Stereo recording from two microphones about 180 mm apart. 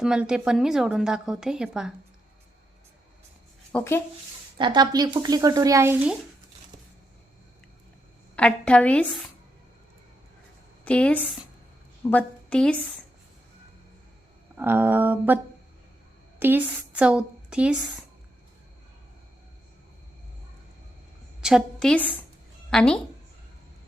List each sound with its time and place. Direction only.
0.0 s a woman's voice: 5° right (ahead or behind)
3.7 s speech: 10° left (ahead or behind)
4.5 s speech: 25° right (ahead or behind)
8.4 s a woman's voice: 5° left (ahead or behind)
10.8 s a woman's voice: 5° left (ahead or behind)
14.5 s a sound: 10° right (ahead or behind)
16.4 s a woman's voice: 10° right (ahead or behind)
21.4 s a woman's voice: centre (ahead or behind)